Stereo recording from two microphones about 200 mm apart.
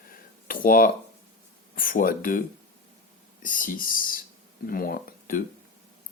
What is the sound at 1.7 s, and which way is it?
Speech, 45° left (ahead or behind).